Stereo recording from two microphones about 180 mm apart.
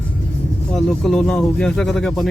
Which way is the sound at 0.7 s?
Centre (ahead or behind).